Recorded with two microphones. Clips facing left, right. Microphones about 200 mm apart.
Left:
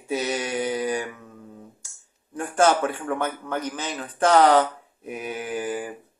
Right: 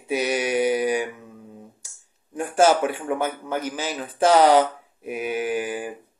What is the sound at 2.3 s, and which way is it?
Speech, 10° right (ahead or behind).